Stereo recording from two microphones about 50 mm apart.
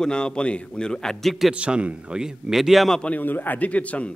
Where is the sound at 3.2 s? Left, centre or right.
Left.